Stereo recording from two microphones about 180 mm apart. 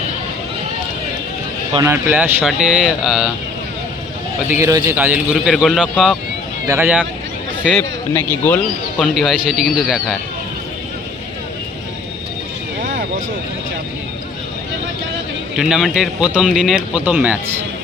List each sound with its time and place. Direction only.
1.7 s speech: 15° right (ahead or behind)
4.4 s a man's voice: 15° right (ahead or behind)
6.7 s a man's voice: 10° right (ahead or behind)
7.8 s a man's voice: 10° left (ahead or behind)
9.1 s speech: centre (ahead or behind)
12.8 s vehicle: 50° right (ahead or behind)
15.5 s speech: centre (ahead or behind)